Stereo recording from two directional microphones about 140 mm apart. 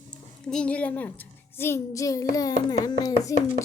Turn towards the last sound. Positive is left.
turn(degrees=25)  # may be behind; listen again after turning